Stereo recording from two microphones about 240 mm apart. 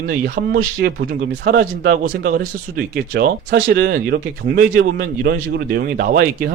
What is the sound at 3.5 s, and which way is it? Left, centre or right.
Speech, right.